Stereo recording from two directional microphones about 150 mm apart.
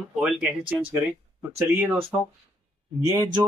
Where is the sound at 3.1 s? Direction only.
25° right (ahead or behind).